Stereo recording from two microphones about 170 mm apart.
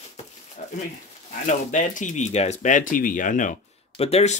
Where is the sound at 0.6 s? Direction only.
45° left (ahead or behind).